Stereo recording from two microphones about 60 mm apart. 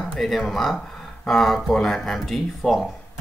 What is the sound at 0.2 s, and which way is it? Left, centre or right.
Speech, centre.